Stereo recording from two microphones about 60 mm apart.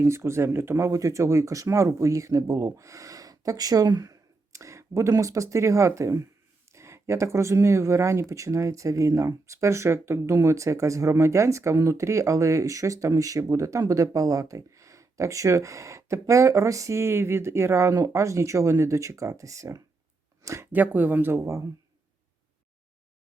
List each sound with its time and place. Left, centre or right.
0.0 s speech: right
0.8 s speech: right
17.0 s speech: right
20.4 s a sound: right
20.7 s speech: right